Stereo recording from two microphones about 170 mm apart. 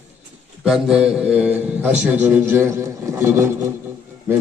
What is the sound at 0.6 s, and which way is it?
A man's voice, 5° right (ahead or behind).